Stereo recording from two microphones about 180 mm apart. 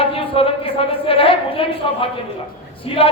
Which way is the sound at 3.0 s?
30° left (ahead or behind).